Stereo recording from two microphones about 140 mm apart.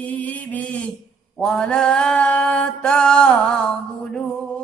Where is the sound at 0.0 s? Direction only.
10° left (ahead or behind).